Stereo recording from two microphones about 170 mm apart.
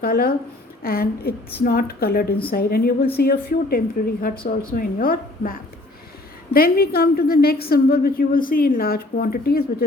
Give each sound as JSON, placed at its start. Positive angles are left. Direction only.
{"t": 0.0, "sound": "a woman's voice", "side_deg": 60}